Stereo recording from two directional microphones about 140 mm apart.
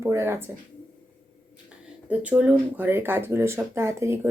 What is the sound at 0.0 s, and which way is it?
Speech, 20° right (ahead or behind).